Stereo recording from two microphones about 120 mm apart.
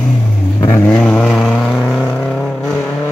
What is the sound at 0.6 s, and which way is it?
Vehicle, 15° left (ahead or behind).